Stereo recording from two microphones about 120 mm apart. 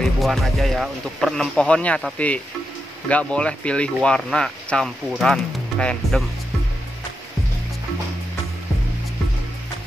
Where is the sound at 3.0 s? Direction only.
10° left (ahead or behind).